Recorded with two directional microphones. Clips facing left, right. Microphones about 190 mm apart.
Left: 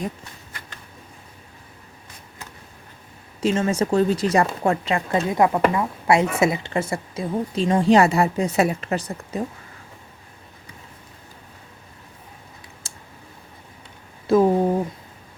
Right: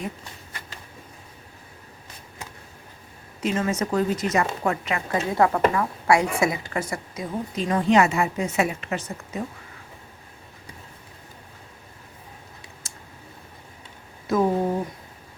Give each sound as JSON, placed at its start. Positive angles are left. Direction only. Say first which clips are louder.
{"t": 3.4, "sound": "a woman's voice", "louder": "left 4 dB", "side_deg": 30}
{"t": 5.3, "sound": "a woman's voice", "louder": "left 1 dB", "side_deg": 15}
{"t": 12.8, "sound": "a sound", "louder": "left 1 dB", "side_deg": 30}
{"t": 14.3, "sound": "speech", "louder": "left 6 dB", "side_deg": 30}